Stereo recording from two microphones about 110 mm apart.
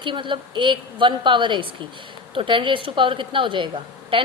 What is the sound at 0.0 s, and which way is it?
A woman's voice, 45° right (ahead or behind).